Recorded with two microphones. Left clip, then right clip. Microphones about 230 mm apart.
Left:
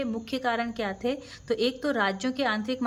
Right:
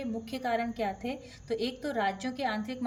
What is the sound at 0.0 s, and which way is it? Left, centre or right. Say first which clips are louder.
A woman's voice: left 6 dB; centre.